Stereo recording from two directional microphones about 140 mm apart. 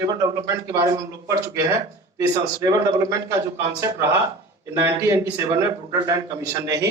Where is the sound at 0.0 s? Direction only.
25° right (ahead or behind).